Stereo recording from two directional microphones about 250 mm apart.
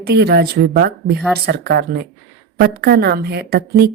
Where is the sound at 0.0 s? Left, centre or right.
Right.